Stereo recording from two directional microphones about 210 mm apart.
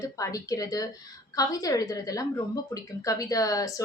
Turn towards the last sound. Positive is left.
turn(degrees=15)  # may be behind; listen again after turning